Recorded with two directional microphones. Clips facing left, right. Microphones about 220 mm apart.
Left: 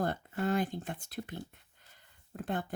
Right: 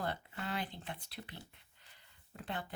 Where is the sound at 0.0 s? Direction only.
45° left (ahead or behind).